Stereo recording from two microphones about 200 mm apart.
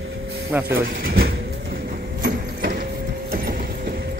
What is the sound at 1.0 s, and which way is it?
Speech, 50° right (ahead or behind).